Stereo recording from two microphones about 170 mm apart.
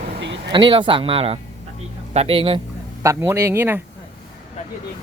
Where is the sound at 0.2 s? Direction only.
90° right.